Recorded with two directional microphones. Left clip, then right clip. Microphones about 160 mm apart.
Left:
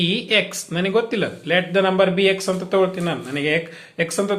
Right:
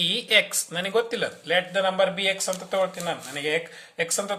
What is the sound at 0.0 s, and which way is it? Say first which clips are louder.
A man's voice: left 2 dB; 30° right (ahead or behind).